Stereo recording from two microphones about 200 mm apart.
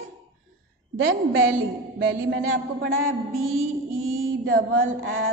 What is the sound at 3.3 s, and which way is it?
Mantra, 90° right.